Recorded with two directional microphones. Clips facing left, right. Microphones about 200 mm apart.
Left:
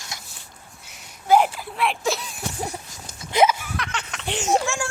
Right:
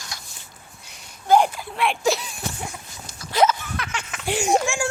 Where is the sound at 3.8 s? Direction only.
5° right (ahead or behind).